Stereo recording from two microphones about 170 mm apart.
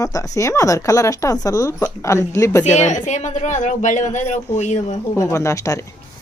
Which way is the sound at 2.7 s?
45° left (ahead or behind).